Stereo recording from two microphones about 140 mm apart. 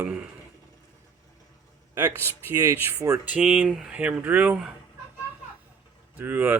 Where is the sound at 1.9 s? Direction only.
20° right (ahead or behind).